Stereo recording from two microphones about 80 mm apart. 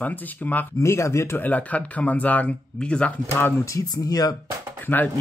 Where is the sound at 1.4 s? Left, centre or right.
Centre.